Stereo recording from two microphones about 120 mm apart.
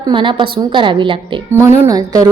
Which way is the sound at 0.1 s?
45° right (ahead or behind).